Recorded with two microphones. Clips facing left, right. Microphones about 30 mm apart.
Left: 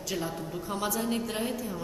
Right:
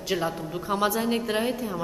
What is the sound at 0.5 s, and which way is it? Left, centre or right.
A woman's voice, right.